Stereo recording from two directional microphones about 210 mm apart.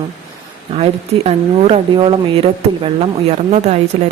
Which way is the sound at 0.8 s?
30° right (ahead or behind).